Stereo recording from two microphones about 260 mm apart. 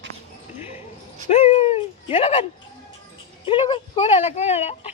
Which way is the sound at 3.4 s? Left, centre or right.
Centre.